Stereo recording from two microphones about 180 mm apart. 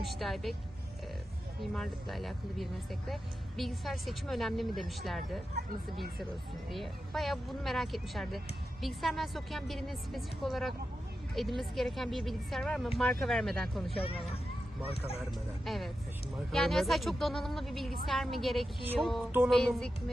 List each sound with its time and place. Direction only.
0.0 s a woman's voice: centre (ahead or behind)
1.7 s a woman's voice: centre (ahead or behind)
6.7 s a woman's voice: centre (ahead or behind)
13.9 s speech: 30° left (ahead or behind)
15.3 s a woman's voice: centre (ahead or behind)